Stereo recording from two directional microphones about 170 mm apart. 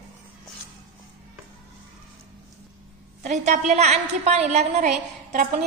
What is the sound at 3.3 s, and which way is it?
A woman's voice, 40° right (ahead or behind).